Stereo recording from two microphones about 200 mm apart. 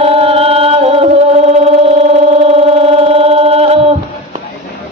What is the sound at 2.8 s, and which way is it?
Music, 30° right (ahead or behind).